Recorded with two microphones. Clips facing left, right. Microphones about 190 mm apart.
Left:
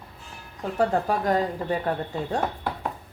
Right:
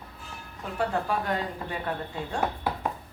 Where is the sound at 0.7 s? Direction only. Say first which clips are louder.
Left 4 dB; 40° left (ahead or behind).